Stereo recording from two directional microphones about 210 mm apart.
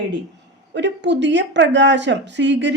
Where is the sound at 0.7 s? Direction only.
55° right (ahead or behind).